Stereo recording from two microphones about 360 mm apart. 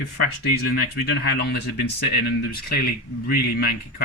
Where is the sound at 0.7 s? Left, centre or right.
Left.